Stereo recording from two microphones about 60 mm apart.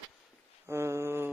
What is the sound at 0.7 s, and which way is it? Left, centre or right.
Mantra, right.